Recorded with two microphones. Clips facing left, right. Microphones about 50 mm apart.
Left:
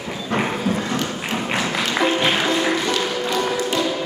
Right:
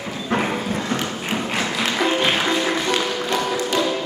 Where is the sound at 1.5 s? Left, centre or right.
Centre.